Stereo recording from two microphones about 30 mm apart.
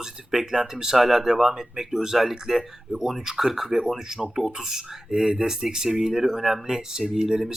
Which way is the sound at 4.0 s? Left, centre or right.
Centre.